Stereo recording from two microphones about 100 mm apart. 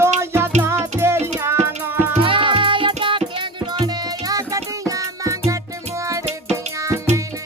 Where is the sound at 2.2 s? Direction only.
60° right (ahead or behind).